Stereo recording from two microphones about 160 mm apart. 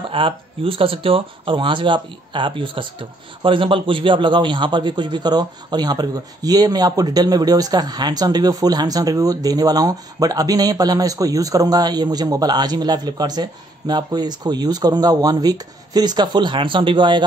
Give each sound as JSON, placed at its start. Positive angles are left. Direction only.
{"t": 0.1, "sound": "speech", "side_deg": -35}